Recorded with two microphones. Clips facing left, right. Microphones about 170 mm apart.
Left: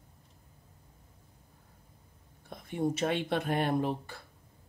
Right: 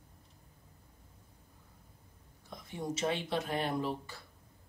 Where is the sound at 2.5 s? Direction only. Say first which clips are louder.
Left 7 dB; 55° left (ahead or behind).